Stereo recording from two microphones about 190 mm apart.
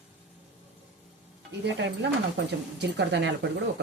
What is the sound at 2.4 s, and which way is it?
Speech, 65° right (ahead or behind).